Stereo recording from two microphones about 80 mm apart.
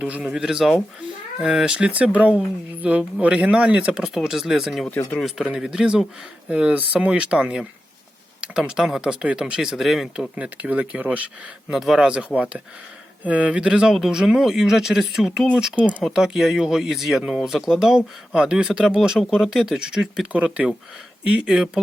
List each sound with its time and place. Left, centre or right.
0.0 s speech: centre
10.3 s speech: centre
11.7 s speech: centre